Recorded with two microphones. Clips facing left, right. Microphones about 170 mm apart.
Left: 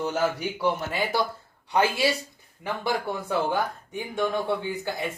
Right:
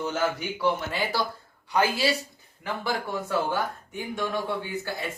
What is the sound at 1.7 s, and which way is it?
Speech, 25° left (ahead or behind).